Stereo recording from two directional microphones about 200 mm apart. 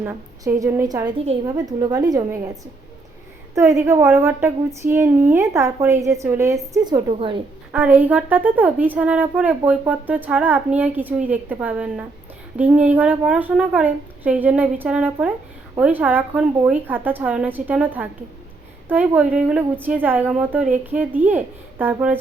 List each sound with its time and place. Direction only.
0.0 s a woman's voice: 15° right (ahead or behind)
3.5 s a woman's voice: 15° right (ahead or behind)
7.7 s a woman's voice: 10° right (ahead or behind)